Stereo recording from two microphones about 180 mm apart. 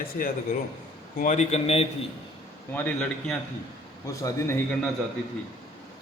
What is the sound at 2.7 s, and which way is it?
A man's voice, 10° left (ahead or behind).